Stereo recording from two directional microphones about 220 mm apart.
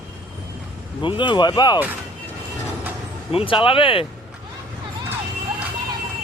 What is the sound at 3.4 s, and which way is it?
Speech, 25° left (ahead or behind).